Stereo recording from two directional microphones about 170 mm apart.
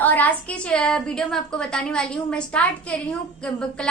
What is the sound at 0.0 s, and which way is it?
A woman's voice, 10° left (ahead or behind).